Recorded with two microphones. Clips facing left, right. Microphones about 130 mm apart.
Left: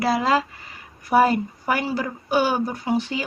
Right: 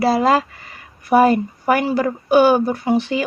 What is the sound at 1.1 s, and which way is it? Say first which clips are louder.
Speech: right 4 dB; 55° right (ahead or behind).